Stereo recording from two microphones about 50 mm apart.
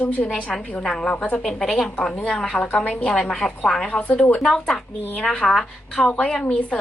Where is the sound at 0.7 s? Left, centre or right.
Centre.